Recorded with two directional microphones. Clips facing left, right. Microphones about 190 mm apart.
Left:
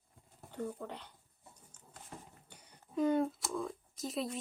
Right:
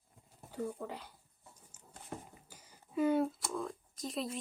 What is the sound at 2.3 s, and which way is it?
Speech, 5° right (ahead or behind).